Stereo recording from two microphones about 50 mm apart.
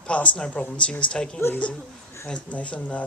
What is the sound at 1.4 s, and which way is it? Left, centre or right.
Speech, left.